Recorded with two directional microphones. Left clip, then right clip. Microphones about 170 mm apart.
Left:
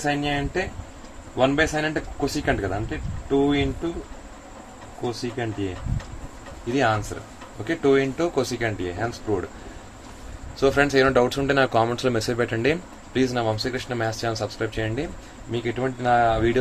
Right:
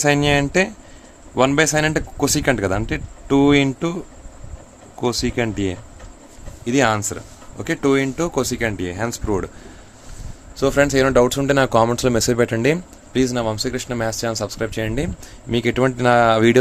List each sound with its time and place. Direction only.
0.0 s speech: 90° right
5.4 s speech: 90° right
6.7 s speech: 80° right
10.6 s speech: 60° right (ahead or behind)
15.5 s speech: 90° right